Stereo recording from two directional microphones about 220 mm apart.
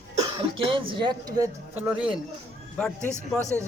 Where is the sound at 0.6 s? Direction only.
25° right (ahead or behind); by 2.2 s 5° right (ahead or behind).